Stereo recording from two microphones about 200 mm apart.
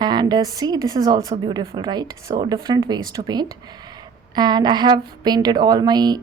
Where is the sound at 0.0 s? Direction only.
20° right (ahead or behind).